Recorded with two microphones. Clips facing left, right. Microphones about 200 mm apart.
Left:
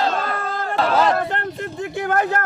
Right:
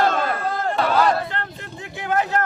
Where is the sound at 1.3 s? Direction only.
50° left (ahead or behind).